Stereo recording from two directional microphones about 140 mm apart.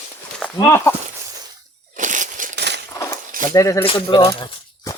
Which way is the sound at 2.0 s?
65° right (ahead or behind).